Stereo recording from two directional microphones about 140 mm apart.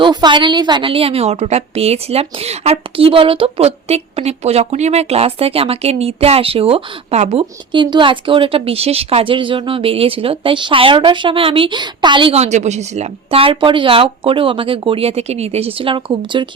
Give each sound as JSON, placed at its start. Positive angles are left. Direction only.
{"t": 0.0, "sound": "a woman's voice", "side_deg": -30}
{"t": 7.7, "sound": "speech", "side_deg": -35}
{"t": 12.4, "sound": "speech", "side_deg": -55}